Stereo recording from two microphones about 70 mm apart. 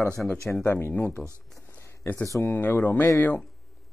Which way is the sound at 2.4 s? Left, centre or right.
Left.